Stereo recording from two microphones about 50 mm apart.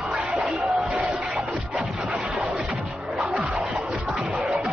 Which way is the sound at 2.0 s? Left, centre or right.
Centre.